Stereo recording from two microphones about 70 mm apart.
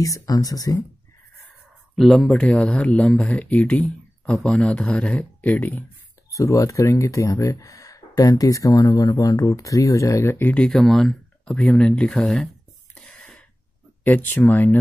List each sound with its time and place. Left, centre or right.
0.0 s speech: left
2.0 s speech: centre
2.3 s speech: centre
6.3 s speech: left
10.7 s speech: centre
12.9 s a sound: centre
14.0 s speech: left